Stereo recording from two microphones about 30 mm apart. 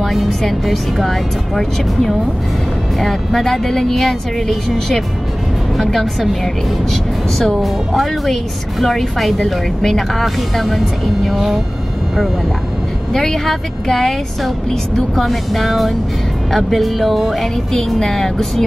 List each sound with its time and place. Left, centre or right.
0.0 s a woman's voice: centre
3.9 s a woman's voice: centre
6.4 s a woman's voice: centre
11.3 s speech: centre
13.1 s speech: centre
15.2 s a woman's voice: centre
17.9 s speech: centre